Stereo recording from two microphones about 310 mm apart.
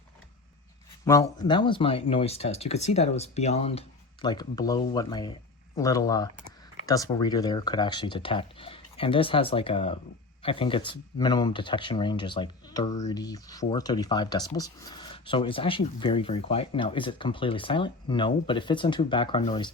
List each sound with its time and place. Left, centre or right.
1.0 s speech: centre